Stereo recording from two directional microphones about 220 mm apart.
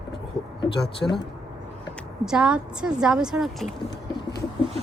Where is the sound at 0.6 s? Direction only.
20° left (ahead or behind).